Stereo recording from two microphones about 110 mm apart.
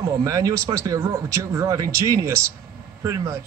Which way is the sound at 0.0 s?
30° right (ahead or behind).